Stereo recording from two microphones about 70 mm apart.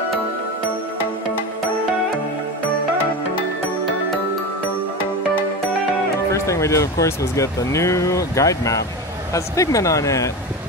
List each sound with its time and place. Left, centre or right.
6.3 s speech: left